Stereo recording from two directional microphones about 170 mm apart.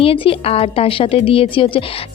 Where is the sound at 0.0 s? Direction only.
35° left (ahead or behind).